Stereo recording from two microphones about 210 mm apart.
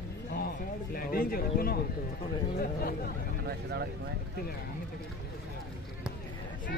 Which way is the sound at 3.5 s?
50° right (ahead or behind).